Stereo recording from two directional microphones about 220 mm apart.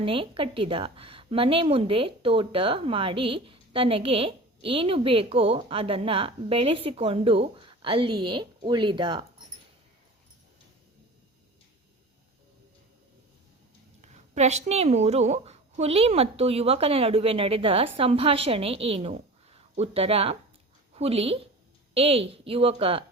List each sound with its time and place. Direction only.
0.0 s a woman's voice: 25° right (ahead or behind)
14.0 s a woman's voice: 30° right (ahead or behind)